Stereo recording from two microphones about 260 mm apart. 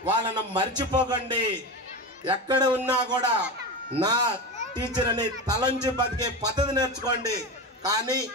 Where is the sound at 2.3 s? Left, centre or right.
Centre.